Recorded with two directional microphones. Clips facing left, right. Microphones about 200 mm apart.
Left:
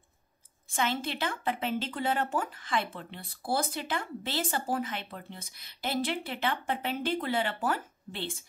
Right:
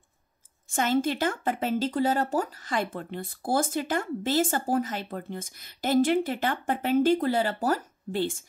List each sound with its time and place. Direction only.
0.7 s a woman's voice: 45° right (ahead or behind)